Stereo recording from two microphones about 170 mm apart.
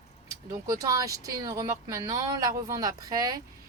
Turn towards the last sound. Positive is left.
turn(degrees=-25)  # may be behind; listen again after turning